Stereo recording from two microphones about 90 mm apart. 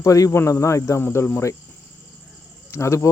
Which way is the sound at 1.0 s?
25° left (ahead or behind).